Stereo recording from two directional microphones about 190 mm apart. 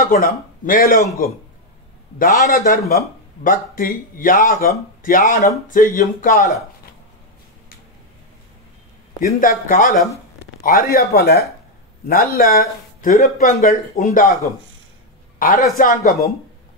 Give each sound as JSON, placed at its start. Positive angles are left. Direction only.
{"t": 0.1, "sound": "speech", "side_deg": 45}
{"t": 2.1, "sound": "speech", "side_deg": 45}
{"t": 9.4, "sound": "speech", "side_deg": 45}
{"t": 15.3, "sound": "a sound", "side_deg": 45}
{"t": 15.8, "sound": "speech", "side_deg": 45}